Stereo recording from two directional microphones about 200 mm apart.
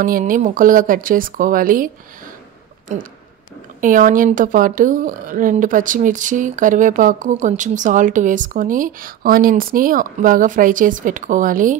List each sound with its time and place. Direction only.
0.0 s speech: 45° right (ahead or behind)
2.9 s speech: 35° right (ahead or behind)